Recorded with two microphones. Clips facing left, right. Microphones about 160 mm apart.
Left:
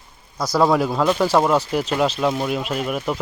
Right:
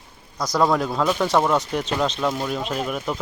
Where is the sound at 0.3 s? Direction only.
5° left (ahead or behind).